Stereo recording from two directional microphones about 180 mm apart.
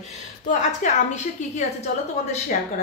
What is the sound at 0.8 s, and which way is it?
Speech, 45° left (ahead or behind).